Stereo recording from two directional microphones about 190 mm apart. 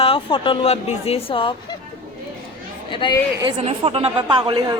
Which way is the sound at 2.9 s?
25° left (ahead or behind).